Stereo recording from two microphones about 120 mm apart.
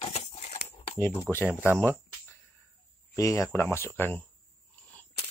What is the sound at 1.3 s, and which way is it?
Speech, 20° left (ahead or behind).